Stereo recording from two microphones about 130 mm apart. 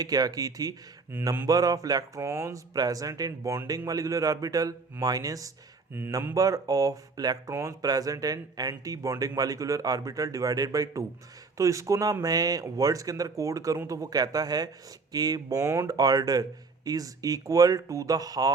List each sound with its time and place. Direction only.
0.0 s speech: 30° right (ahead or behind)
5.9 s speech: 15° right (ahead or behind)